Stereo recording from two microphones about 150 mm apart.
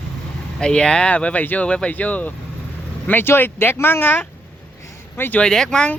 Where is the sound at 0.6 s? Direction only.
5° left (ahead or behind).